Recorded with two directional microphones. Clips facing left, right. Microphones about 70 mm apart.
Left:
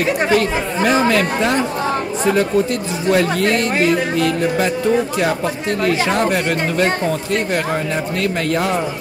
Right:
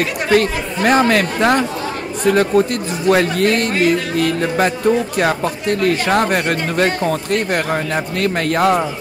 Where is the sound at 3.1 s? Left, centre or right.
Right.